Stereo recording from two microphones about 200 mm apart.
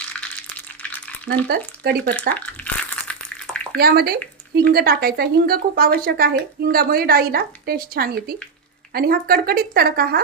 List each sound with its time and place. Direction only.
1.5 s a woman's voice: 55° right (ahead or behind)
2.3 s a sound: 5° left (ahead or behind)
3.8 s a woman's voice: 50° right (ahead or behind)